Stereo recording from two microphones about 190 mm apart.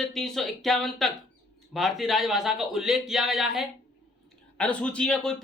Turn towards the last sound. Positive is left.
turn(degrees=5)  # may be behind; listen again after turning